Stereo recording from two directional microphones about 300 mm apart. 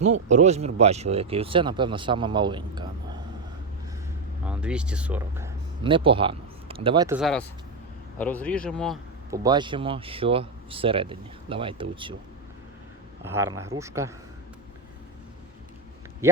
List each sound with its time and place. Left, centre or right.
0.0 s speech: right
4.4 s speech: centre
5.8 s speech: centre
7.2 s speech: centre
9.3 s speech: centre
13.2 s speech: centre
16.2 s speech: centre